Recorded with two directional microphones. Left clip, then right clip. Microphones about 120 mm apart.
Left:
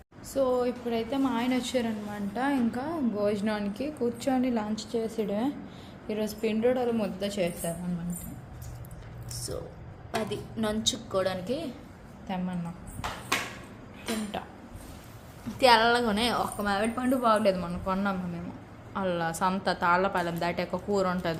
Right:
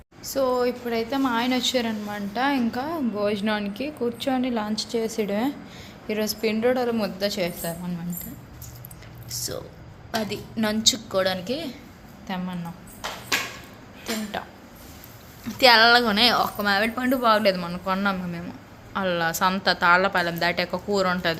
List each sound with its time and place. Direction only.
0.3 s a woman's voice: 15° right (ahead or behind); by 4.7 s 5° left (ahead or behind)
4.7 s a woman's voice: 5° right (ahead or behind)
10.2 s a woman's voice: 5° right (ahead or behind)
14.0 s speech: 5° left (ahead or behind)
15.4 s a woman's voice: 5° right (ahead or behind)